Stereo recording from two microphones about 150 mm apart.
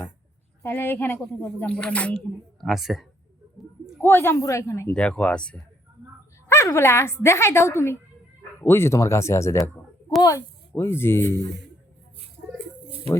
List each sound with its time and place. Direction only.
0.6 s speech: 15° left (ahead or behind)
4.0 s speech: 15° left (ahead or behind)
4.9 s speech: 5° left (ahead or behind)
6.5 s speech: 20° left (ahead or behind)